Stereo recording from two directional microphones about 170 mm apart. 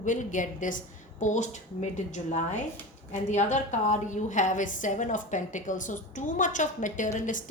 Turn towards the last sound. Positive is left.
turn(degrees=50)  # may be behind; listen again after turning